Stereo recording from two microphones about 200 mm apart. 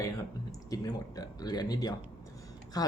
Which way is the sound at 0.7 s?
20° left (ahead or behind).